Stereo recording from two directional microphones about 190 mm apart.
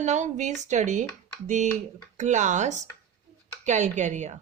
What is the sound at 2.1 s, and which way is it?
Speech, 40° right (ahead or behind).